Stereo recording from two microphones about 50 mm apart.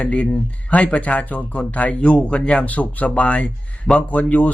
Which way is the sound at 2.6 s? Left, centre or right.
Left.